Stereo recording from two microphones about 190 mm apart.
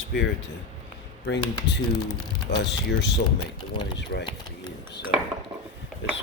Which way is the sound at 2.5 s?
65° left (ahead or behind).